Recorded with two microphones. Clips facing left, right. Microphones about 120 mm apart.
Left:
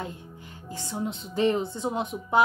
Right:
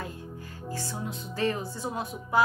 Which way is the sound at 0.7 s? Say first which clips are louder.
Left 3 dB; 20° left (ahead or behind).